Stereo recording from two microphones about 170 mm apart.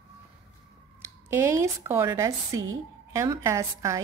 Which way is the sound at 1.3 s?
15° right (ahead or behind).